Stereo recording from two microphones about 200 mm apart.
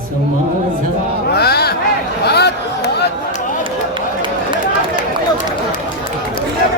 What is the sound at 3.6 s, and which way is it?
Run, 25° right (ahead or behind).